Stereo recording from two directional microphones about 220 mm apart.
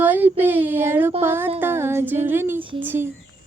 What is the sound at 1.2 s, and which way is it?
Speech, 10° right (ahead or behind).